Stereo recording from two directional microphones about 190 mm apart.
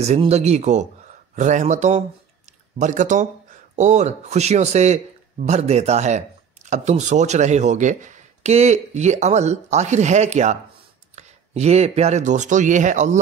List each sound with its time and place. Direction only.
0.0 s speech: 35° right (ahead or behind)